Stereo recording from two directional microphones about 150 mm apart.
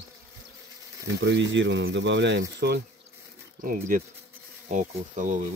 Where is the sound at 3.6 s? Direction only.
70° right (ahead or behind).